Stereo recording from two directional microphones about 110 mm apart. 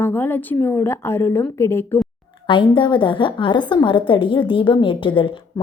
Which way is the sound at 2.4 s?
50° left (ahead or behind).